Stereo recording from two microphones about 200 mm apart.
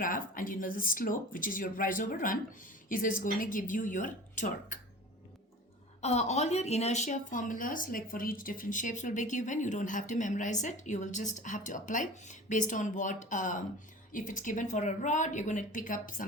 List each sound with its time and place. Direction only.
0.0 s speech: 45° left (ahead or behind)
6.0 s a woman's voice: 35° left (ahead or behind)